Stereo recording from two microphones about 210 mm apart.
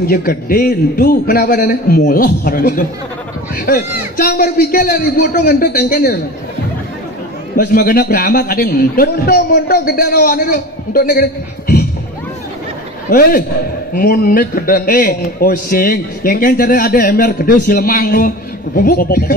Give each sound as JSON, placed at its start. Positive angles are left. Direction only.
{"t": 0.1, "sound": "a man's voice", "side_deg": 45}
{"t": 7.5, "sound": "a man's voice", "side_deg": 45}
{"t": 13.1, "sound": "a man's voice", "side_deg": 45}